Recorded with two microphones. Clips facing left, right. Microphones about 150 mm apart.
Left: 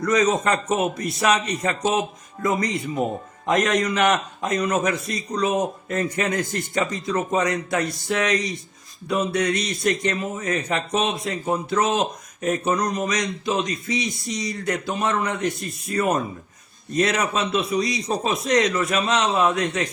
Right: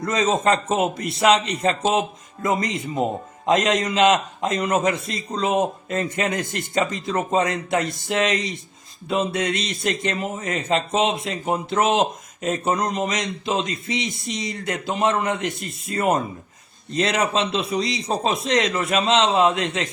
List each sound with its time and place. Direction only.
0.0 s a man's voice: 25° right (ahead or behind)